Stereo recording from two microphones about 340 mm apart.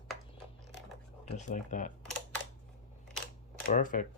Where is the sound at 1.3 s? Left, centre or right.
Left.